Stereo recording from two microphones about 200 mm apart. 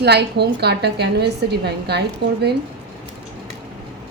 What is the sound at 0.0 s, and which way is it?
A woman's voice, 55° right (ahead or behind).